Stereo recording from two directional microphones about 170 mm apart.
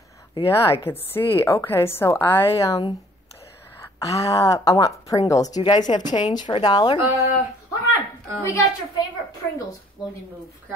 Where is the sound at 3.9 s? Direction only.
20° left (ahead or behind).